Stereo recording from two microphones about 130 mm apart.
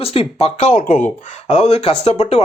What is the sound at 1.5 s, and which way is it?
Speech, 55° left (ahead or behind).